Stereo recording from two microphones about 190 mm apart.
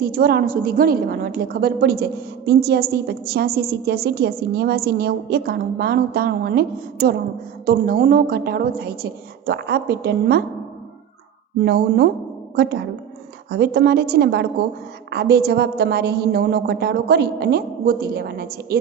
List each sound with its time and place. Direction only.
0.0 s a woman's voice: 50° right (ahead or behind)
11.6 s a woman's voice: 60° right (ahead or behind)